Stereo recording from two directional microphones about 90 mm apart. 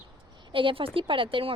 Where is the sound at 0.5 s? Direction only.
75° right (ahead or behind).